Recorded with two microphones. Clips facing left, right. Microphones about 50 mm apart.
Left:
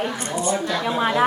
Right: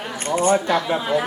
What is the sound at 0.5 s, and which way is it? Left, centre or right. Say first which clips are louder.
Speech: right 5 dB; right.